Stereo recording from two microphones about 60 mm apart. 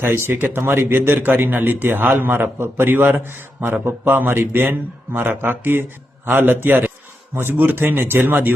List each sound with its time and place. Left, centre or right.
0.0 s a man's voice: right